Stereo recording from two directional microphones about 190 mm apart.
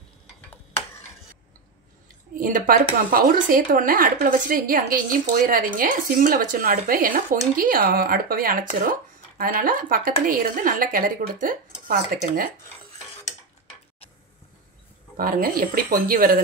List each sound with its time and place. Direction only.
2.3 s speech: 45° right (ahead or behind)
15.1 s speech: 50° right (ahead or behind)